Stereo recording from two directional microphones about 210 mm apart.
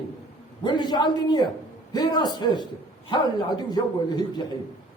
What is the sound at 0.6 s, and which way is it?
A man's voice, 20° left (ahead or behind).